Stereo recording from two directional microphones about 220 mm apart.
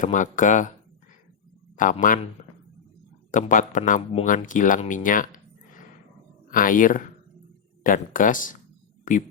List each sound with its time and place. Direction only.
0.0 s speech: 35° left (ahead or behind)
1.7 s speech: 35° left (ahead or behind)
3.3 s speech: 35° left (ahead or behind)